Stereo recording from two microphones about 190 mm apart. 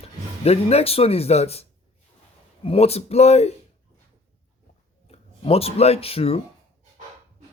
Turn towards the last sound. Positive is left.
turn(degrees=30)  # may be behind; listen again after turning